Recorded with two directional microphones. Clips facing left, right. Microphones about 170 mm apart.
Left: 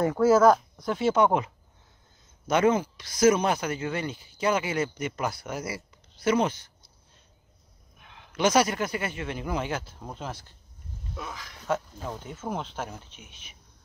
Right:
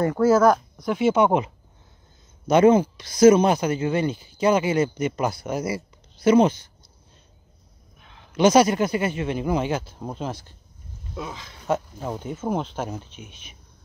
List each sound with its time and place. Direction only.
0.0 s speech: centre (ahead or behind)
0.8 s speech: 15° right (ahead or behind)
8.0 s a sound: centre (ahead or behind)
8.4 s speech: 25° right (ahead or behind)